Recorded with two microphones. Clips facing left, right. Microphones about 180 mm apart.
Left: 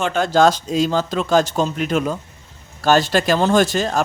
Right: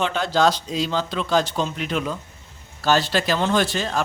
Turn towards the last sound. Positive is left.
turn(degrees=45)  # may be behind; listen again after turning